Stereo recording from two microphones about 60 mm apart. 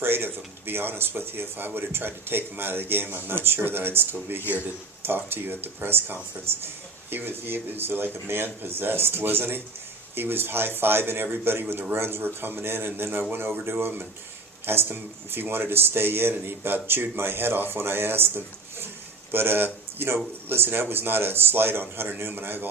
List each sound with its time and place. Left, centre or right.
0.0 s speech: right